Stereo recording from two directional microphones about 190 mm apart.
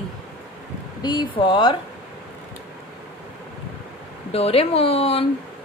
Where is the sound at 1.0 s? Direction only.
25° left (ahead or behind).